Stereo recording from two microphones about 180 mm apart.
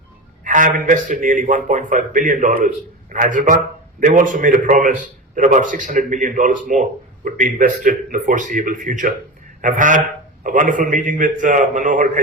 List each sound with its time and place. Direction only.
0.4 s a man's voice: 45° right (ahead or behind)
9.6 s a sound: 45° right (ahead or behind)
10.4 s a man's voice: 45° right (ahead or behind)